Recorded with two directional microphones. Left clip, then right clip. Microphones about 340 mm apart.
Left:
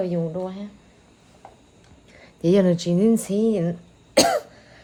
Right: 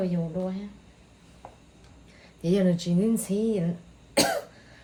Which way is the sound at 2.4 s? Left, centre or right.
Left.